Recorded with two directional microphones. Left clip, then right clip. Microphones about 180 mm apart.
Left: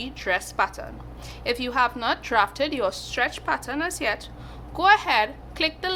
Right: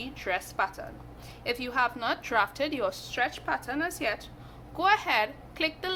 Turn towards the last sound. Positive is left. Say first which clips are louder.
# left 5 dB
turn(degrees=15)  # may be behind; listen again after turning